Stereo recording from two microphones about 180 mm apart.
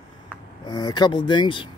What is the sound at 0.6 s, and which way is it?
Speech, 20° left (ahead or behind).